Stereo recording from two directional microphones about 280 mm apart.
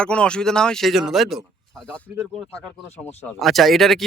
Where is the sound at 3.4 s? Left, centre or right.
Centre.